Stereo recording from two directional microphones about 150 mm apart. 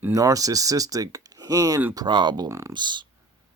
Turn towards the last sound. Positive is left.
turn(degrees=-30)  # may be behind; listen again after turning